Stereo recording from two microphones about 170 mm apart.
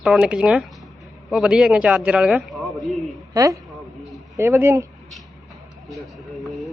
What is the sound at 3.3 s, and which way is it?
A woman's voice, 20° right (ahead or behind).